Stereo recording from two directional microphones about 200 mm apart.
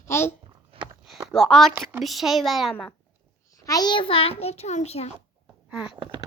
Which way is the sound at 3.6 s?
20° left (ahead or behind).